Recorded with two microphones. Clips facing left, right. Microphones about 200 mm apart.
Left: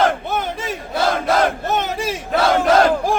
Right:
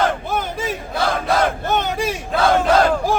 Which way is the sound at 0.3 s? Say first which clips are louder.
Even; centre (ahead or behind).